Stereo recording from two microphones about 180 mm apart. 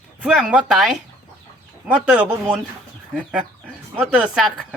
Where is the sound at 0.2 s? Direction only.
5° right (ahead or behind).